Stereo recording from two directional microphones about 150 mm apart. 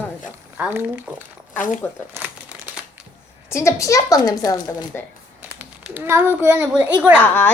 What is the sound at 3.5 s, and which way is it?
Speech, 20° left (ahead or behind).